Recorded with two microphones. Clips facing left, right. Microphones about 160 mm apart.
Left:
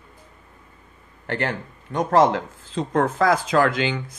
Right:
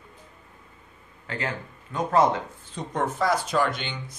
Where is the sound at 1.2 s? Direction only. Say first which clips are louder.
Left 6 dB; 70° left (ahead or behind).